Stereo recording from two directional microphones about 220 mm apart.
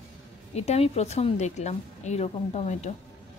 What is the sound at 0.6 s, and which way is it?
A woman's voice, 30° left (ahead or behind).